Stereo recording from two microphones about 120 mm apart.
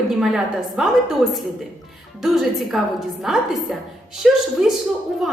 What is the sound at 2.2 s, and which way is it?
A woman's voice, centre (ahead or behind).